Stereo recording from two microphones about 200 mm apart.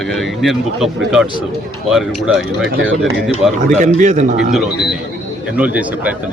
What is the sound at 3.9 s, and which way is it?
Speech, 35° right (ahead or behind).